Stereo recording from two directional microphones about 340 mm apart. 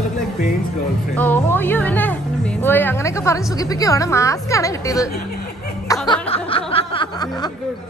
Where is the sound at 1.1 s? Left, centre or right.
Centre.